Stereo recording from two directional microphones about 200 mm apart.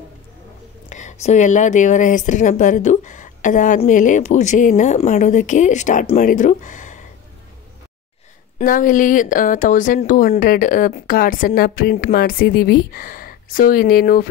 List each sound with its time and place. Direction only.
0.8 s speech: 35° left (ahead or behind)
8.5 s a woman's voice: 45° left (ahead or behind)